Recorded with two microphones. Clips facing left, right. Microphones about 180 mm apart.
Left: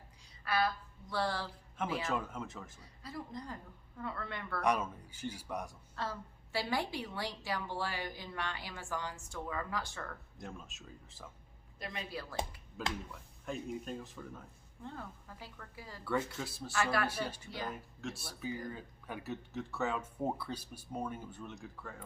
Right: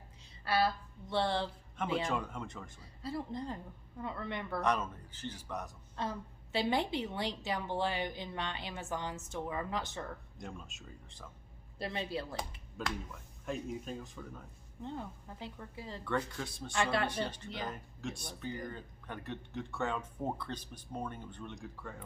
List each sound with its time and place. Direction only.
0.4 s a woman's voice: 30° right (ahead or behind)
2.0 s speech: 5° left (ahead or behind)
3.0 s a woman's voice: 30° right (ahead or behind)
4.6 s speech: 10° left (ahead or behind)
6.0 s a woman's voice: 20° right (ahead or behind)
10.3 s speech: centre (ahead or behind)
11.8 s a woman's voice: 30° right (ahead or behind)
13.1 s speech: centre (ahead or behind)
14.8 s a woman's voice: 20° right (ahead or behind)
16.0 s speech: 5° left (ahead or behind)
16.7 s a woman's voice: 25° right (ahead or behind)
17.1 s speech: 10° left (ahead or behind)